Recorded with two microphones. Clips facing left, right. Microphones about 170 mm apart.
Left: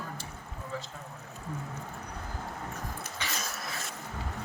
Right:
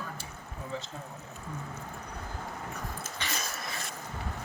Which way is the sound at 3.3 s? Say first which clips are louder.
Even; centre (ahead or behind).